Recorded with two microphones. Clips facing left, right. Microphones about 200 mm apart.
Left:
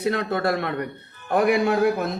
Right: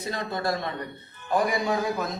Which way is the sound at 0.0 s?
65° left (ahead or behind).